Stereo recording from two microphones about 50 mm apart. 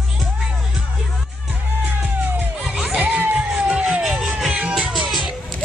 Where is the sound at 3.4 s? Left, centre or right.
Centre.